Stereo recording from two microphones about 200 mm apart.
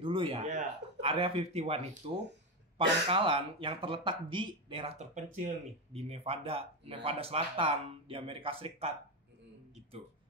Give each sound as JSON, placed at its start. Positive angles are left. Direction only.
{"t": 0.0, "sound": "speech", "side_deg": -25}